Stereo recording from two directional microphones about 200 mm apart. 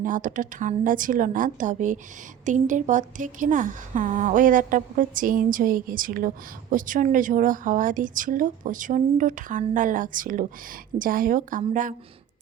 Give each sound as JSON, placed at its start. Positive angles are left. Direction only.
{"t": 0.0, "sound": "a woman's voice", "side_deg": -40}